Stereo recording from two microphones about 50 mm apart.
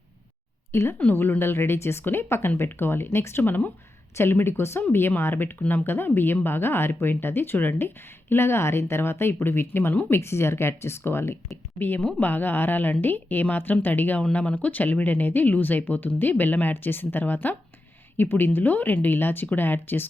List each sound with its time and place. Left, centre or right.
0.7 s speech: left
10.2 s speech: left
12.2 s speech: left